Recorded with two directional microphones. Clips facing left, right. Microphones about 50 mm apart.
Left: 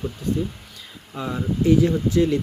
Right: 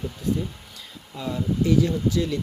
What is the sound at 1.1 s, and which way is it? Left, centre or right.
Speech, left.